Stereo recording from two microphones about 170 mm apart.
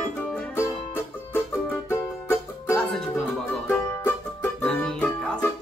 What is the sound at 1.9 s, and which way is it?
Music, 15° left (ahead or behind).